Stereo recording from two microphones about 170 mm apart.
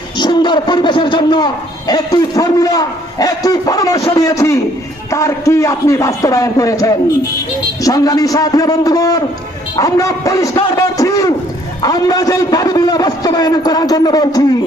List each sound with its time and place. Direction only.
0.2 s a man's voice: 25° left (ahead or behind)